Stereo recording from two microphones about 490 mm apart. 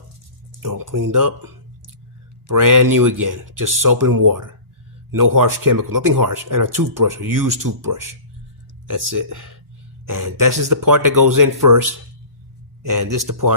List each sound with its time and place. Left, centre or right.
0.6 s speech: right
2.5 s speech: right